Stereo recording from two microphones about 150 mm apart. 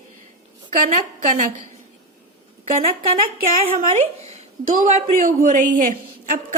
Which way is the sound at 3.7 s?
50° right (ahead or behind).